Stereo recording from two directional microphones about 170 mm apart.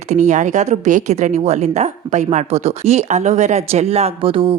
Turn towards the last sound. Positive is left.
turn(degrees=-30)  # may be behind; listen again after turning